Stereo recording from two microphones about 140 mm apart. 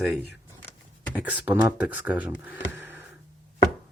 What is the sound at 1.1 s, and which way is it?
Speech, 10° right (ahead or behind).